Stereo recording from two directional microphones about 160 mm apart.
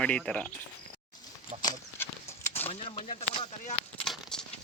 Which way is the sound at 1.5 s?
40° right (ahead or behind).